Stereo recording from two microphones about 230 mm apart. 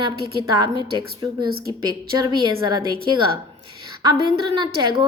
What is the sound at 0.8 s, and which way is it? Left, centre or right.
A woman's voice, centre.